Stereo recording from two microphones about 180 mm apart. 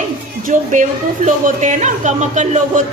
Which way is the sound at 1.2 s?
40° right (ahead or behind).